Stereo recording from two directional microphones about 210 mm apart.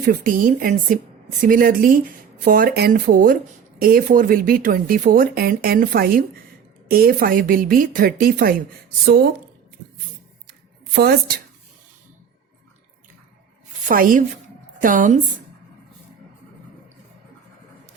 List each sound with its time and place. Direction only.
0.1 s speech: 40° right (ahead or behind)
10.9 s speech: 50° right (ahead or behind)
13.8 s speech: 40° right (ahead or behind)